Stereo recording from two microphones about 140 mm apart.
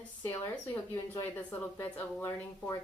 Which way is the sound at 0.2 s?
15° left (ahead or behind).